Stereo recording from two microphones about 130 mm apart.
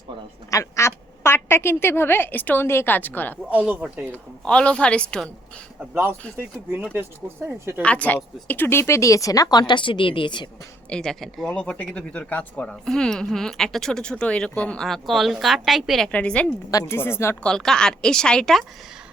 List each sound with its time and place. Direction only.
0.5 s speech: 20° left (ahead or behind)
3.5 s speech: 10° right (ahead or behind)
4.1 s speech: 10° left (ahead or behind)
5.9 s speech: 20° right (ahead or behind)
7.8 s speech: 10° left (ahead or behind); by 10.5 s 40° left (ahead or behind)
10.8 s speech: 5° left (ahead or behind)
16.7 s speech: 20° left (ahead or behind)
17.4 s speech: 5° left (ahead or behind)